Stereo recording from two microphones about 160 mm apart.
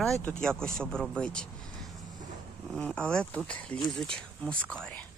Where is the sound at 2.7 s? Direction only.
5° left (ahead or behind).